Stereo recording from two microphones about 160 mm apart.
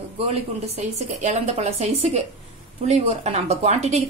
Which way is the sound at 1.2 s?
40° right (ahead or behind).